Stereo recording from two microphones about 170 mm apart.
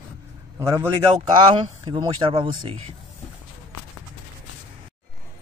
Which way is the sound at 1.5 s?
30° right (ahead or behind).